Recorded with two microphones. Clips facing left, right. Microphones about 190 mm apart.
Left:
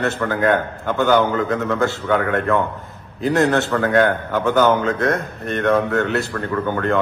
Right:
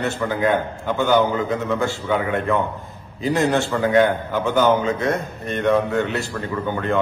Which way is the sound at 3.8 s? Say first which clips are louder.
Right 3 dB; 15° right (ahead or behind).